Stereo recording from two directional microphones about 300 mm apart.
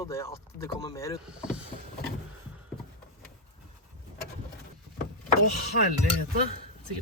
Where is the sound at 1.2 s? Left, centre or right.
Centre.